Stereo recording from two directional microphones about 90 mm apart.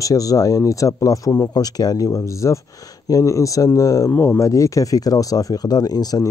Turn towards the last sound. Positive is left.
turn(degrees=45)  # may be behind; listen again after turning